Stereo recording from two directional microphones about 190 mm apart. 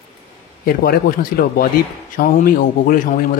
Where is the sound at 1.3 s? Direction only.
55° left (ahead or behind).